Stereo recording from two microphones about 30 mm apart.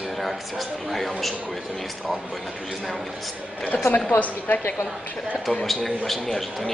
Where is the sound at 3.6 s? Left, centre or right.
Left.